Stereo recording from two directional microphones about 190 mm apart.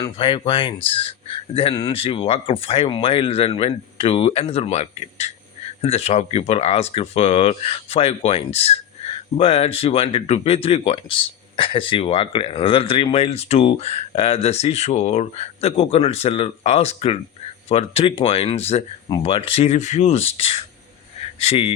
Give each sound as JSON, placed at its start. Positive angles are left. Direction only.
{"t": 0.0, "sound": "a man's voice", "side_deg": 25}